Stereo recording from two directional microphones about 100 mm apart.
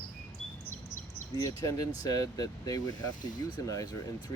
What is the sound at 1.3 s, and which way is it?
Speech, 30° left (ahead or behind).